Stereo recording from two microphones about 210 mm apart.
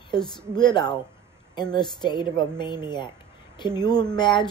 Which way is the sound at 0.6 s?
20° left (ahead or behind).